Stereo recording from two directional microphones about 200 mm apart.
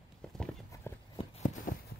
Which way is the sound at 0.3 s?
Centre (ahead or behind).